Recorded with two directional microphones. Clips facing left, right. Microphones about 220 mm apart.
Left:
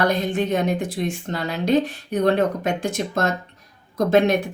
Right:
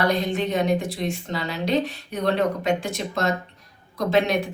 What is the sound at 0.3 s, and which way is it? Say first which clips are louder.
Speech: left 1 dB; 50° left (ahead or behind).